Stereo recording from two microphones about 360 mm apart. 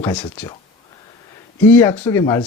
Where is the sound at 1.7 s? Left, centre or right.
Centre.